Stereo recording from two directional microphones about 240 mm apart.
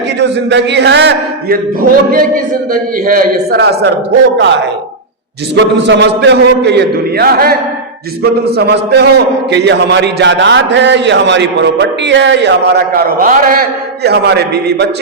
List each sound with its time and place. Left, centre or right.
0.2 s a man's voice: right
5.8 s a man's voice: right